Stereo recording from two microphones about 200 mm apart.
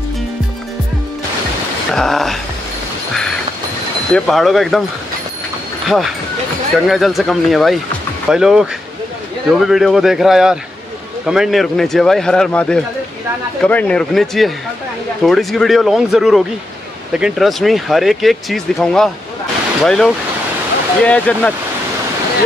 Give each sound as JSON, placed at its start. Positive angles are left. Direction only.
{"t": 2.0, "sound": "speech", "side_deg": 0}
{"t": 4.1, "sound": "speech", "side_deg": 0}
{"t": 5.9, "sound": "speech", "side_deg": 0}